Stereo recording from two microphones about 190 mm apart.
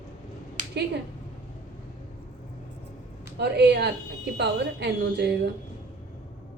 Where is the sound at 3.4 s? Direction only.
60° right (ahead or behind).